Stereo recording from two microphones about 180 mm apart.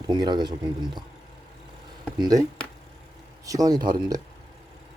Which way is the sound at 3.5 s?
20° right (ahead or behind).